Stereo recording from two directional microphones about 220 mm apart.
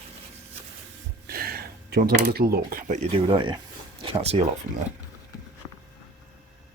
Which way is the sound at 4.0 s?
25° right (ahead or behind).